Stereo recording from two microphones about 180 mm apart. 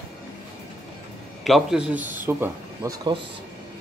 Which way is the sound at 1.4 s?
Centre (ahead or behind).